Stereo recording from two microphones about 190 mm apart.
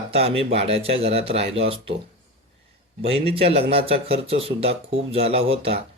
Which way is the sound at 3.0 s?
30° right (ahead or behind).